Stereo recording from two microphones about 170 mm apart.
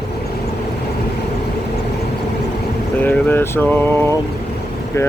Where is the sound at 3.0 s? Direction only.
10° left (ahead or behind).